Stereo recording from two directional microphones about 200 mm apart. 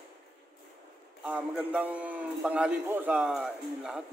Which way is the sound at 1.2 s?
5° right (ahead or behind).